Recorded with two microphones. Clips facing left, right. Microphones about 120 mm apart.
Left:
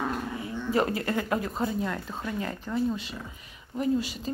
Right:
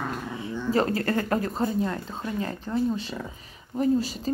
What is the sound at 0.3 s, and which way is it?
Dog, 30° right (ahead or behind).